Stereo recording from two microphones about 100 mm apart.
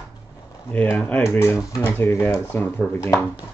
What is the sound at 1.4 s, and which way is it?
Speech, 30° left (ahead or behind).